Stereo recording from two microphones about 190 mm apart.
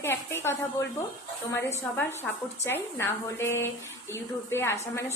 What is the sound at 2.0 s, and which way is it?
Speech, 10° left (ahead or behind).